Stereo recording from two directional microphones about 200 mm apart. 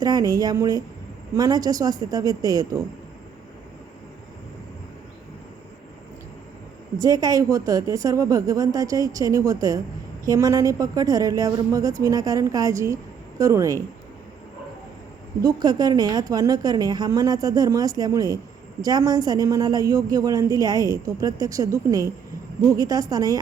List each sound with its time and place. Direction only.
0.0 s a woman's voice: 20° right (ahead or behind)
7.0 s a woman's voice: 15° right (ahead or behind)
15.4 s a woman's voice: 20° right (ahead or behind)